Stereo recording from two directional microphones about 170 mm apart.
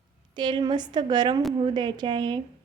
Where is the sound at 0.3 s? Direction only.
25° right (ahead or behind).